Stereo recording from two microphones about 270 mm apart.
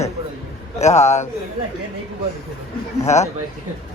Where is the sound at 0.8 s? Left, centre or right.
Left.